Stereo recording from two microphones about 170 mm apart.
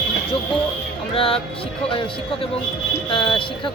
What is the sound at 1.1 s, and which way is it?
Speech, 35° left (ahead or behind).